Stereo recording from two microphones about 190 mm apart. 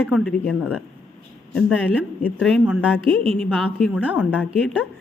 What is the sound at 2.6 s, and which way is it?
A woman's voice, 5° right (ahead or behind).